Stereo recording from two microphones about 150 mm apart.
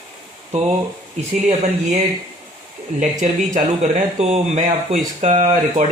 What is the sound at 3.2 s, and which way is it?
Speech, 55° right (ahead or behind).